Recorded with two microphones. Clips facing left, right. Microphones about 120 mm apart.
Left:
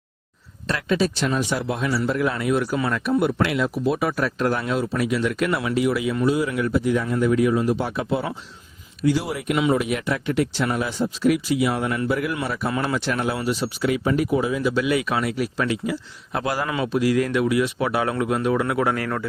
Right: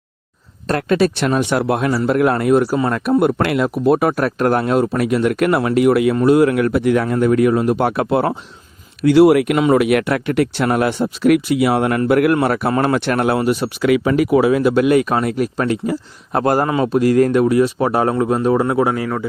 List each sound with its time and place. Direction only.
0.7 s speech: 55° right (ahead or behind)
2.6 s speech: 40° right (ahead or behind); by 9.6 s 70° right (ahead or behind)
9.6 s speech: 60° right (ahead or behind); by 19.3 s 20° right (ahead or behind)